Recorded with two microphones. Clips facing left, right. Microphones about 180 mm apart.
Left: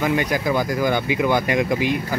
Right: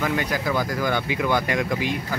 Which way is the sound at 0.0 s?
15° left (ahead or behind).